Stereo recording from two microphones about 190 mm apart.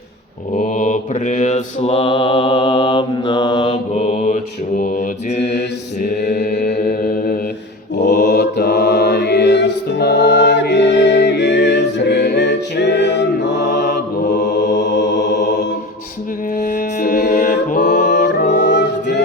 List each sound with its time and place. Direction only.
0.5 s mantra: 45° left (ahead or behind); by 3.7 s 25° left (ahead or behind)
3.7 s mantra: 35° left (ahead or behind)
5.4 s mantra: 65° left (ahead or behind); by 8.3 s 40° left (ahead or behind)
8.3 s music: 60° left (ahead or behind)
13.8 s mantra: 40° left (ahead or behind)
14.8 s music: 65° left (ahead or behind)
15.3 s music: 40° left (ahead or behind)
16.6 s music: 40° left (ahead or behind); by 17.4 s 60° left (ahead or behind)
17.4 s mantra: 40° left (ahead or behind)
18.1 s music: 65° left (ahead or behind)